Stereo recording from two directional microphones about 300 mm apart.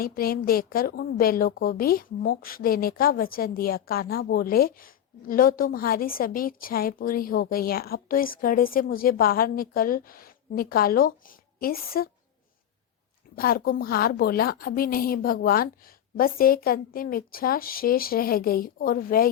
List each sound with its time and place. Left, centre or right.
0.0 s a woman's voice: left
13.3 s a woman's voice: left